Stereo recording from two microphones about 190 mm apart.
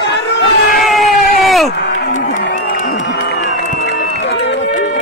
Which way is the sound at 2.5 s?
45° left (ahead or behind).